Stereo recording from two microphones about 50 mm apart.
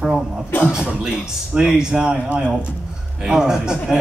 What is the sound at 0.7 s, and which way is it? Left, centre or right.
A man's voice, centre.